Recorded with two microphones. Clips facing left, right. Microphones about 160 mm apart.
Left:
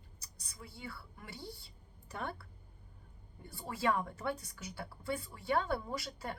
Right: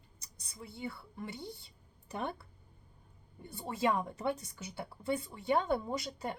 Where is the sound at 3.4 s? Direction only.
20° right (ahead or behind).